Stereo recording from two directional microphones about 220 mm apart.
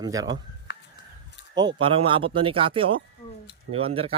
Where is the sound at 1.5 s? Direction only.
20° right (ahead or behind).